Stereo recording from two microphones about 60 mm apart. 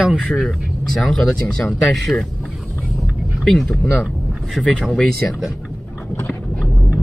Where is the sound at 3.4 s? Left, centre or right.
Centre.